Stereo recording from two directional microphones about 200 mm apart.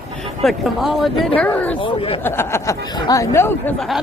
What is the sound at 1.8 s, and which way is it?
Speech, 25° left (ahead or behind).